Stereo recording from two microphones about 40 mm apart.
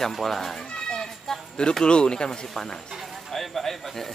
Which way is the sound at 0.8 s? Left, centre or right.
Centre.